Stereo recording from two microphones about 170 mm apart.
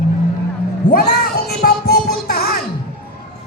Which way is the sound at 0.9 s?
70° left (ahead or behind).